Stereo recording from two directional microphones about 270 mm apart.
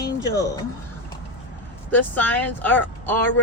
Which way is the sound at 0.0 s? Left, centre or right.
Centre.